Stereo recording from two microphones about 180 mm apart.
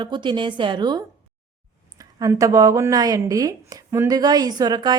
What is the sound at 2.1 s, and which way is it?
Speech, 20° right (ahead or behind).